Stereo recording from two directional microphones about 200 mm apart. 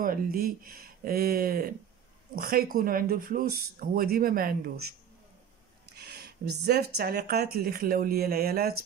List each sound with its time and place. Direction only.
0.0 s speech: 45° right (ahead or behind)
5.9 s speech: 55° right (ahead or behind)